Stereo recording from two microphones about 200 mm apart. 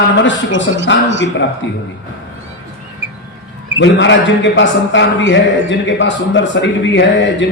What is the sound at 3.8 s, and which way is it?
Speech, 65° left (ahead or behind).